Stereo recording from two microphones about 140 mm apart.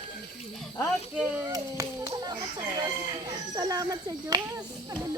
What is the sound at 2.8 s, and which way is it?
Speech, 30° right (ahead or behind).